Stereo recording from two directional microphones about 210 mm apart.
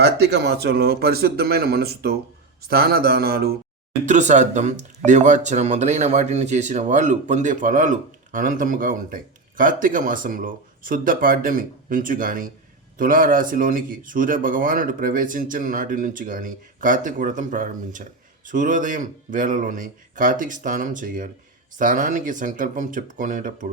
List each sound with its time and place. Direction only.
0.0 s speech: 50° right (ahead or behind)
4.0 s speech: 35° right (ahead or behind)